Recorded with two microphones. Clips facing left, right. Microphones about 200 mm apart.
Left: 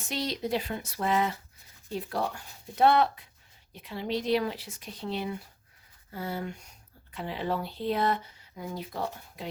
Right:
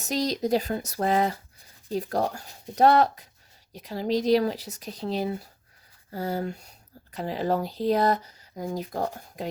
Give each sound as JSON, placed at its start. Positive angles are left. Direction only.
{"t": 0.0, "sound": "speech", "side_deg": -40}